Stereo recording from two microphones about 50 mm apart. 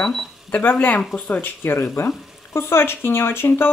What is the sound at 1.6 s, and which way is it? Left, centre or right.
Speech, left.